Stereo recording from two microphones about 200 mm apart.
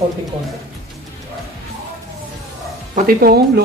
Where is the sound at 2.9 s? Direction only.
50° right (ahead or behind).